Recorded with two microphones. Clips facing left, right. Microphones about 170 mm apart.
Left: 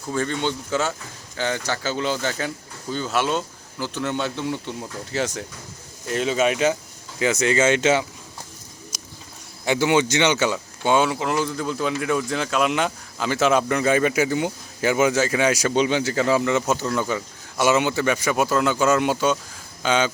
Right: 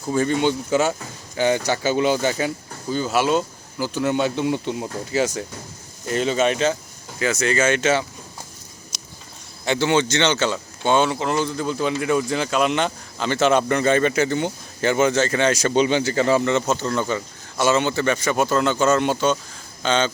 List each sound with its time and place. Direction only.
0.0 s speech: 15° right (ahead or behind)
5.1 s speech: centre (ahead or behind); by 8.0 s 20° left (ahead or behind)
9.6 s speech: 10° left (ahead or behind)